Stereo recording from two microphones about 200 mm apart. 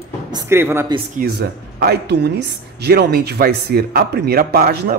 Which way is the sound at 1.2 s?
55° right (ahead or behind).